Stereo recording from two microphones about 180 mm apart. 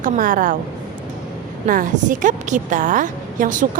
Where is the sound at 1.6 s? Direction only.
50° right (ahead or behind).